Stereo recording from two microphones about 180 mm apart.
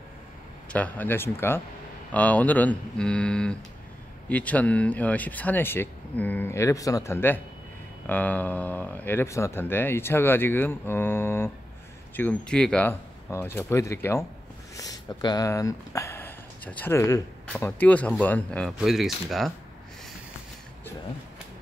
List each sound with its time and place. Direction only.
0.7 s speech: 10° left (ahead or behind)